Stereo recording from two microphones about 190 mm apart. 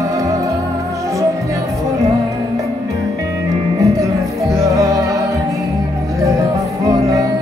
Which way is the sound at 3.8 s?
15° right (ahead or behind).